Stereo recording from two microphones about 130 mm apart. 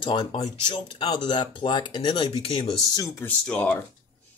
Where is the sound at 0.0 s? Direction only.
35° left (ahead or behind).